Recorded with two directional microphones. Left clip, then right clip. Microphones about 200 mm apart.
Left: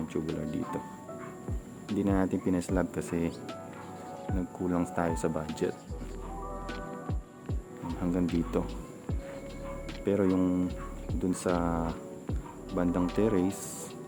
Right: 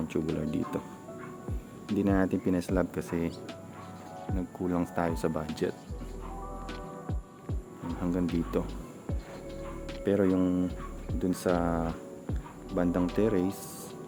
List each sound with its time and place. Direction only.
0.3 s speech: 20° right (ahead or behind)
2.0 s speech: 5° right (ahead or behind)
4.4 s speech: centre (ahead or behind)
7.9 s speech: 5° left (ahead or behind)
10.0 s speech: centre (ahead or behind)